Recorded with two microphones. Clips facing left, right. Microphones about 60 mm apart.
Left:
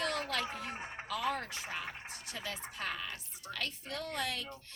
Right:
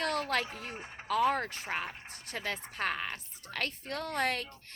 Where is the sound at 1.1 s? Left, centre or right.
Right.